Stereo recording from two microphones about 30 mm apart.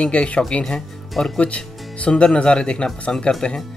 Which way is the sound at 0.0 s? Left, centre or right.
Left.